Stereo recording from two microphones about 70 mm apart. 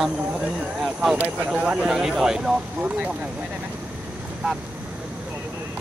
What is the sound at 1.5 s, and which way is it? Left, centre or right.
Speech, centre.